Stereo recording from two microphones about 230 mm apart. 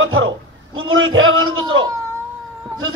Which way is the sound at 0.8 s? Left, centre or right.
Right.